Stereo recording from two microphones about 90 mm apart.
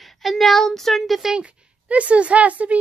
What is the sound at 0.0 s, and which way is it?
Speech, centre (ahead or behind).